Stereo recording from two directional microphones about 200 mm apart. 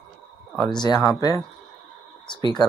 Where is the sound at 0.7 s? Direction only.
20° left (ahead or behind).